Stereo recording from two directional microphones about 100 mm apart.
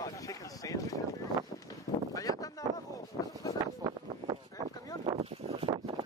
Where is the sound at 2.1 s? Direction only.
35° left (ahead or behind).